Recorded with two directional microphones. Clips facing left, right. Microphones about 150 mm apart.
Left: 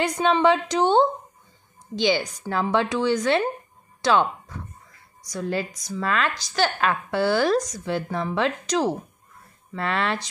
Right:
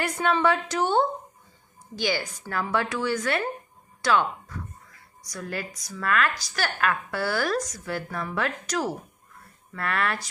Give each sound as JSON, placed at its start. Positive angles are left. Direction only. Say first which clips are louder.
{"t": 0.0, "sound": "a woman's voice", "louder": "left 4 dB", "side_deg": 20}